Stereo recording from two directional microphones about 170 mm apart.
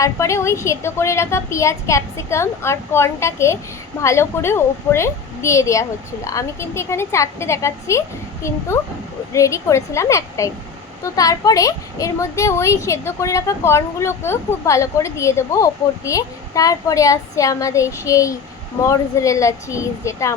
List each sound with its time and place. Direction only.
0.0 s a woman's voice: 15° left (ahead or behind)